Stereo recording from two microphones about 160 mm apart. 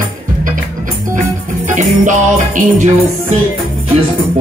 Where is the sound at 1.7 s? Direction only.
50° right (ahead or behind).